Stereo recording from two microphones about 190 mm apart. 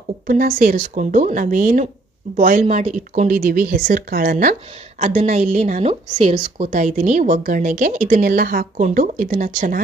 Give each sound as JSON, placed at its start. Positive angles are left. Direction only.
{"t": 0.3, "sound": "a woman's voice", "side_deg": -45}